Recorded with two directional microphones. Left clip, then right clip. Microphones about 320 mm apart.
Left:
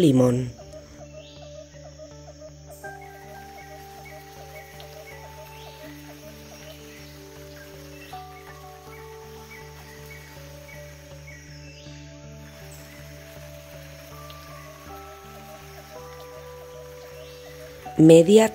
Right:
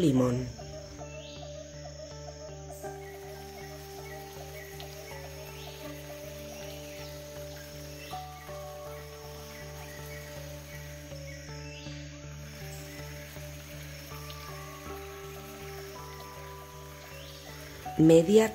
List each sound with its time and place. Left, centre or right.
0.0 s speech: centre
18.0 s speech: centre